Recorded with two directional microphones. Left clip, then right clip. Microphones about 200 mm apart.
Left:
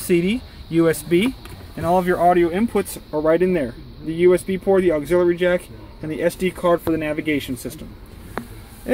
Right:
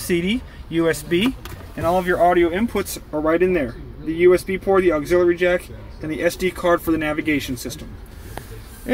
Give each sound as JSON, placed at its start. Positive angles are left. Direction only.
{"t": 0.1, "sound": "speech", "side_deg": 20}